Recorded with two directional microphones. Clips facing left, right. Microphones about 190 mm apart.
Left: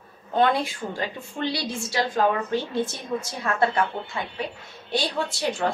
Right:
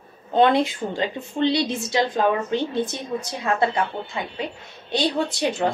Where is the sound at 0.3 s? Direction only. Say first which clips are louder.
Right 4 dB; 20° right (ahead or behind).